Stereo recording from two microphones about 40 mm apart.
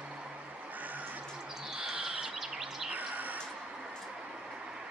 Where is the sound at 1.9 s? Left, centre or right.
Right.